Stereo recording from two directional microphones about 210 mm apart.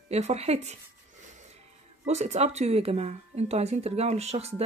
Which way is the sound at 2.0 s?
30° right (ahead or behind).